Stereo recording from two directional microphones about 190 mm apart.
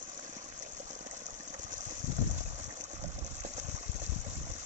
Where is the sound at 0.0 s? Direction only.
40° right (ahead or behind).